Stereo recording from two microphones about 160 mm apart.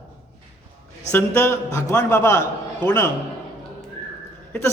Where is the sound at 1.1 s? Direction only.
15° left (ahead or behind).